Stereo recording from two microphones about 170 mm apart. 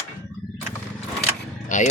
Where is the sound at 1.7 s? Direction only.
50° left (ahead or behind).